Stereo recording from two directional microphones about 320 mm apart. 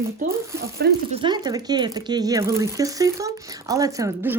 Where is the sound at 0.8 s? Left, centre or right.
Right.